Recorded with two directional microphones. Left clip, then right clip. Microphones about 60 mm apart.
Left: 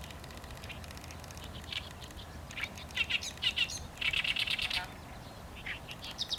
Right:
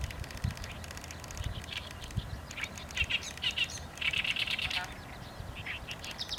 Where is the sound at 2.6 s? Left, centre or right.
Left.